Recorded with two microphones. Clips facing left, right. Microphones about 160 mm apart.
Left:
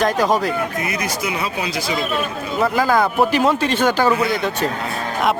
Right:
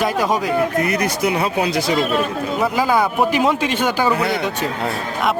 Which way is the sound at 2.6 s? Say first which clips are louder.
Left 1 dB; 10° right (ahead or behind).